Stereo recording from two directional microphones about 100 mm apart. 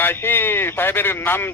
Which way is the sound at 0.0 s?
20° left (ahead or behind).